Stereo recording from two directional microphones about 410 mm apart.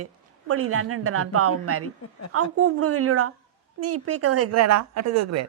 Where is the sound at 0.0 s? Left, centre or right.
Right.